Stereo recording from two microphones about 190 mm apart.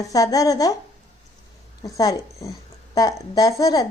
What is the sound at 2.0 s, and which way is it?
Speech, 20° left (ahead or behind).